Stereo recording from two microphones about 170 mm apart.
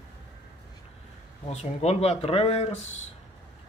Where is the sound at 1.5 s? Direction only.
40° left (ahead or behind).